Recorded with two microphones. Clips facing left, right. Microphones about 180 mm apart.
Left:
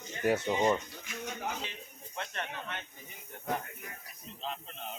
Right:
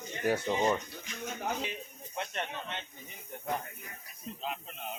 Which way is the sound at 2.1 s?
20° right (ahead or behind).